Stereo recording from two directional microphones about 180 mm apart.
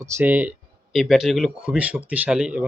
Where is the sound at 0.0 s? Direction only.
10° right (ahead or behind).